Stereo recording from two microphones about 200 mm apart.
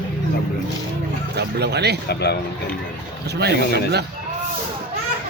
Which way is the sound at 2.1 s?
55° left (ahead or behind).